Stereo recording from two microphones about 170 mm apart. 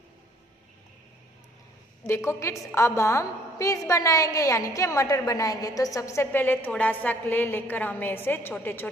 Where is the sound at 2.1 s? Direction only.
15° left (ahead or behind).